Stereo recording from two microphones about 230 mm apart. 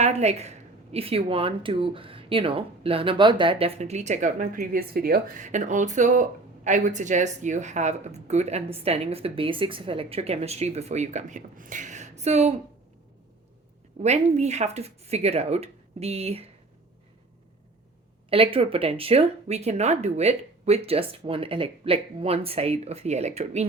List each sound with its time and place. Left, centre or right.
0.0 s a woman's voice: right
14.0 s a woman's voice: right
18.3 s a woman's voice: right